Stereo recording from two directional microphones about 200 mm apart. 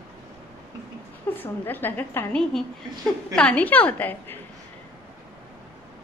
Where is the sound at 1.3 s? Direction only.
10° left (ahead or behind).